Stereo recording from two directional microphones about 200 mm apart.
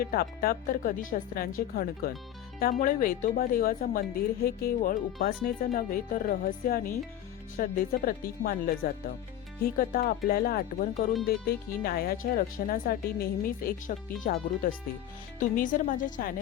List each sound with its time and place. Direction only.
0.0 s speech: 50° left (ahead or behind)